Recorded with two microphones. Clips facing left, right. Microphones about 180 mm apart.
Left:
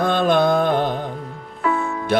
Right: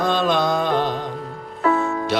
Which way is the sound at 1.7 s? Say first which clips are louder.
Right 2 dB; 40° right (ahead or behind).